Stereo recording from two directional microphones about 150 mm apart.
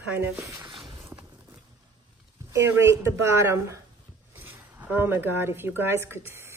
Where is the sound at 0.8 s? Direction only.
30° right (ahead or behind).